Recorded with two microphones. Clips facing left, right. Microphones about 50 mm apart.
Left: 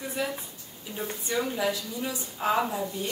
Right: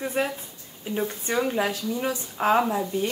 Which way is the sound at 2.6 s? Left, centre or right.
Right.